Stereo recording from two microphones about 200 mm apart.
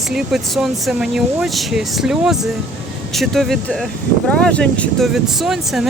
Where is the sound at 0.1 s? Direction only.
5° right (ahead or behind).